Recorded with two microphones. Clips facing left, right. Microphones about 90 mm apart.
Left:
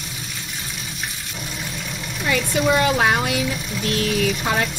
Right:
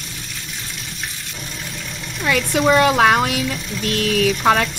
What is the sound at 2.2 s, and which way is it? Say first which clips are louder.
Speech: right 3 dB; 65° right (ahead or behind).